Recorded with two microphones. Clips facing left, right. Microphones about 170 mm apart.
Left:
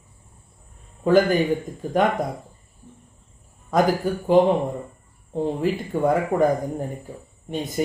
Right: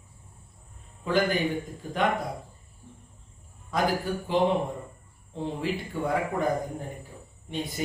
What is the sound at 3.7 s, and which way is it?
Speech, 45° left (ahead or behind).